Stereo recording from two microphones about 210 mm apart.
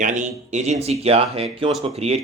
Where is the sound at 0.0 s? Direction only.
35° right (ahead or behind).